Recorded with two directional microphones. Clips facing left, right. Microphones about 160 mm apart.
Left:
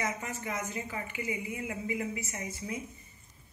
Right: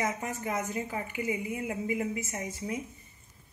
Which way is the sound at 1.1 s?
50° right (ahead or behind).